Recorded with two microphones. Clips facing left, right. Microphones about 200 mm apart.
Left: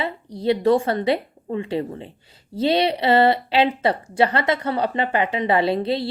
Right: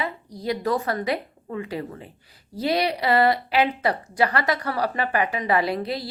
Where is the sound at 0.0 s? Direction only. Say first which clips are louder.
Left 5 dB; 30° left (ahead or behind).